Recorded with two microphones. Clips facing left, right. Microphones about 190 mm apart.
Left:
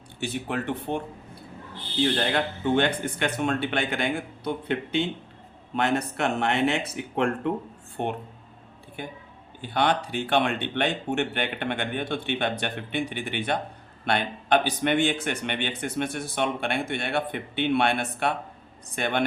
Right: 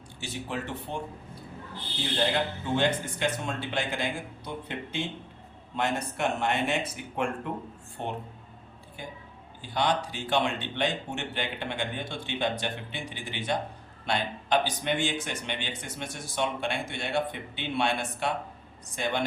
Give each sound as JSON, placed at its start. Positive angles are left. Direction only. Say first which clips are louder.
{"t": 0.2, "sound": "speech", "louder": "left 5 dB", "side_deg": 60}
{"t": 2.1, "sound": "speech", "louder": "left 2 dB", "side_deg": 60}
{"t": 8.0, "sound": "speech", "louder": "left 5 dB", "side_deg": 65}